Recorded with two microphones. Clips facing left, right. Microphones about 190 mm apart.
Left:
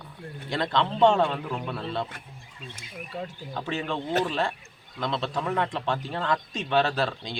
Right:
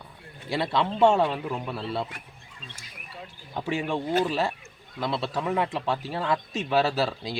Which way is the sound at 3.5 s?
10° right (ahead or behind).